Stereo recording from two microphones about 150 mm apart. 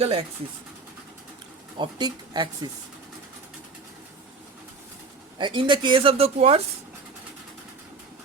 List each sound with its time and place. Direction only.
0.0 s speech: 45° right (ahead or behind)
1.8 s speech: 30° right (ahead or behind)
5.4 s speech: 35° right (ahead or behind)